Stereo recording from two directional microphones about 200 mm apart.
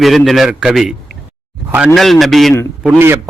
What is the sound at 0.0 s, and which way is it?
Speech, centre (ahead or behind).